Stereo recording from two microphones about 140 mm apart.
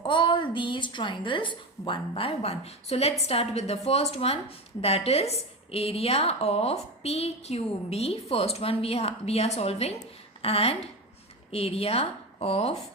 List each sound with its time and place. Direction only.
0.0 s a woman's voice: 35° left (ahead or behind)